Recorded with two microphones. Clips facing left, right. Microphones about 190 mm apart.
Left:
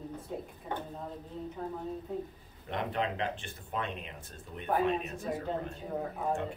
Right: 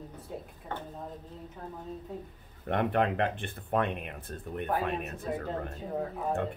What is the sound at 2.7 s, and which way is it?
Speech, 55° right (ahead or behind).